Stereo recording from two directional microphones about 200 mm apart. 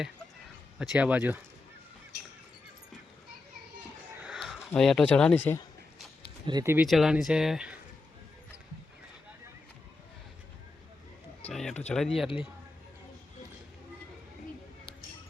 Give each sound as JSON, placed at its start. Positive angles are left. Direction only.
{"t": 0.8, "sound": "speech", "side_deg": -5}
{"t": 4.2, "sound": "speech", "side_deg": 0}
{"t": 6.4, "sound": "speech", "side_deg": -20}
{"t": 6.8, "sound": "speech", "side_deg": 0}
{"t": 11.4, "sound": "a sound", "side_deg": 5}
{"t": 11.9, "sound": "speech", "side_deg": 5}